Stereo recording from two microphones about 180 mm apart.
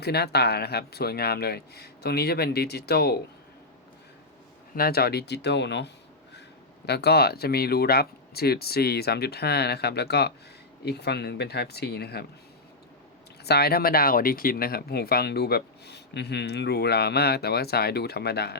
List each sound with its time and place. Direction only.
0.0 s speech: 65° left (ahead or behind)
4.7 s speech: 60° left (ahead or behind)
13.4 s speech: 65° left (ahead or behind)